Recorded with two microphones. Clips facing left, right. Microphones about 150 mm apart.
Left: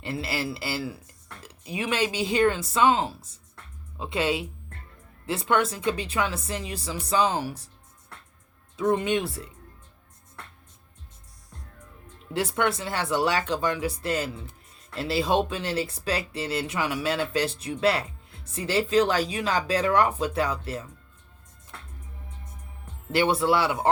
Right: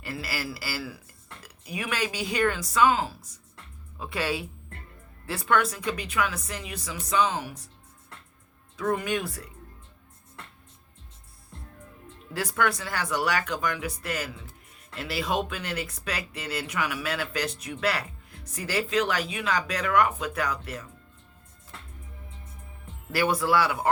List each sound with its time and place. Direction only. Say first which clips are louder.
0.0 s speech: left 4 dB; 25° left (ahead or behind)
8.7 s speech: left 4 dB; 25° left (ahead or behind)
12.3 s speech: left 2 dB; 25° left (ahead or behind)
23.1 s speech: left 2 dB; 25° left (ahead or behind)